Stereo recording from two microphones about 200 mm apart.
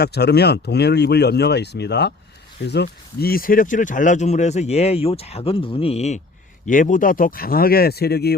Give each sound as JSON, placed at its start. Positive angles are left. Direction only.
{"t": 0.0, "sound": "speech", "side_deg": 55}